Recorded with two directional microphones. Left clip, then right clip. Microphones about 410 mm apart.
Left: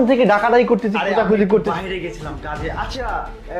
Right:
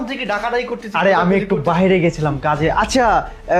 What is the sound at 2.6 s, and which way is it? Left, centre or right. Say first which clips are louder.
Speech: right 11 dB; right.